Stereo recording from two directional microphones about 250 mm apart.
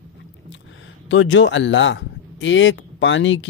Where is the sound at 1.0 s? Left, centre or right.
Left.